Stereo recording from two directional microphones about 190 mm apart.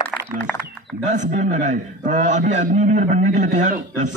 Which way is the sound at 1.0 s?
40° right (ahead or behind).